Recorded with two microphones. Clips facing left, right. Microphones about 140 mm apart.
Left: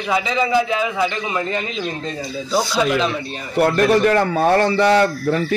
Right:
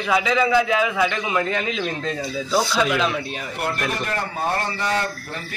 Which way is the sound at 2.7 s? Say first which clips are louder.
Left 2 dB; centre (ahead or behind).